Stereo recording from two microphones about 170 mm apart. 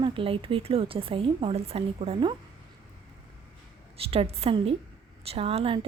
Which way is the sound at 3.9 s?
35° right (ahead or behind).